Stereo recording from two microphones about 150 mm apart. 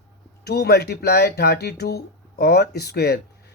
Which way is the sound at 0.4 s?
90° left.